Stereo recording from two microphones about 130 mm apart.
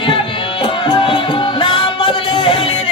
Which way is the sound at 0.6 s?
40° left (ahead or behind).